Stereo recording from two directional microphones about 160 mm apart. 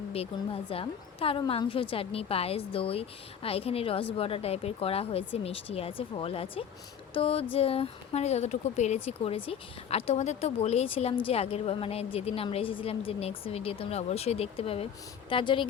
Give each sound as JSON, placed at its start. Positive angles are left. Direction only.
{"t": 0.1, "sound": "a woman's voice", "side_deg": 40}